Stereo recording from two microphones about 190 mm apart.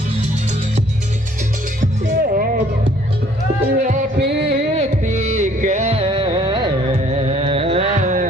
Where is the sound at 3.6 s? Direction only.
40° right (ahead or behind).